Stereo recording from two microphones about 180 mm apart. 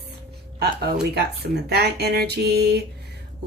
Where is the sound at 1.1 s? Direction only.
65° right (ahead or behind).